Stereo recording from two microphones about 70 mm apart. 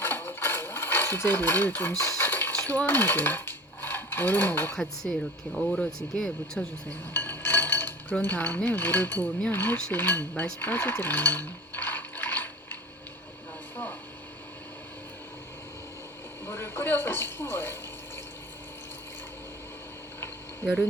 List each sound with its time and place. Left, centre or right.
0.0 s sewing machine: left
2.0 s cutlery: left
2.6 s coin: left
4.8 s speech: centre
7.1 s chink: left
8.2 s cutlery: left
16.5 s a sound: left